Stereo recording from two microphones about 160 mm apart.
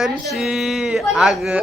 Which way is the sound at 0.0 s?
Centre (ahead or behind).